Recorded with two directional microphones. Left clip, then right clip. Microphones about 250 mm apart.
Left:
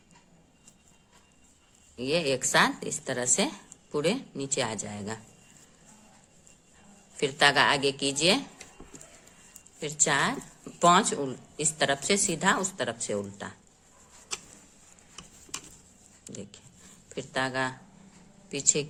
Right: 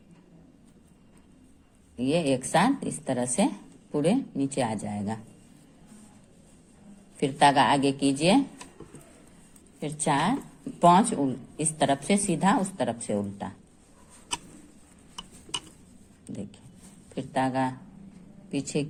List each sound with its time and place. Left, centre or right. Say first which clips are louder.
2.0 s a woman's voice: right 1 dB; centre
7.2 s a woman's voice: right 2 dB; centre
9.8 s a woman's voice: even; centre
16.2 s a sound: right 3 dB; centre
17.2 s a woman's voice: right 2 dB; centre